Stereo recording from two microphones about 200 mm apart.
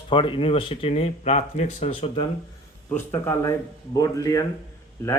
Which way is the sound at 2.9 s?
10° left (ahead or behind).